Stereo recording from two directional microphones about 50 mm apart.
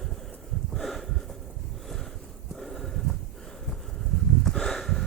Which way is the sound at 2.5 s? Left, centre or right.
Centre.